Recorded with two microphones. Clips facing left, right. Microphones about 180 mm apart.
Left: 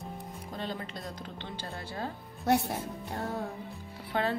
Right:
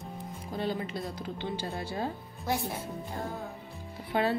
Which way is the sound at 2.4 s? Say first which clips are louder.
Left 5 dB; 65° left (ahead or behind).